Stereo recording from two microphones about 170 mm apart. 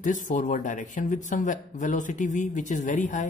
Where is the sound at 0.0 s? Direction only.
50° left (ahead or behind).